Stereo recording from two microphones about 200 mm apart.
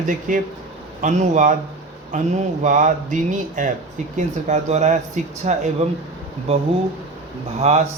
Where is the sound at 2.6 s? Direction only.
40° right (ahead or behind).